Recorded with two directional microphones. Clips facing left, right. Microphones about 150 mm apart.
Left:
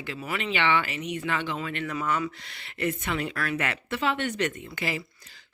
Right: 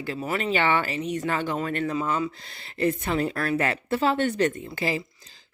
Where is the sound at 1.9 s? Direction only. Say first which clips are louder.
Right 2 dB; 30° right (ahead or behind).